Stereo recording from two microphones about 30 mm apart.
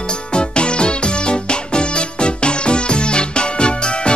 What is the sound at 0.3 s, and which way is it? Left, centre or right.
Music, left.